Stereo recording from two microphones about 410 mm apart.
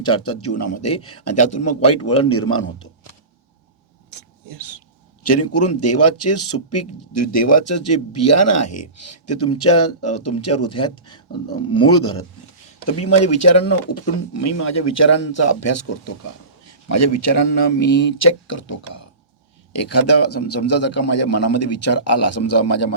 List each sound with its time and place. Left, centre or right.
0.0 s speech: left
4.1 s a sound: right
5.2 s a man's voice: left
17.7 s speech: left
18.2 s speech: left